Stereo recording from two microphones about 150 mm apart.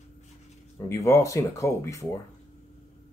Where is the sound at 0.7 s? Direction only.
20° left (ahead or behind).